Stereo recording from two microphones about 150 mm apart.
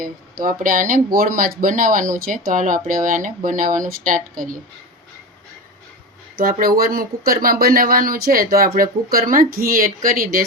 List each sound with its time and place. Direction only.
0.0 s speech: 70° right (ahead or behind)
6.3 s speech: 75° right (ahead or behind)
7.3 s speech: 70° right (ahead or behind)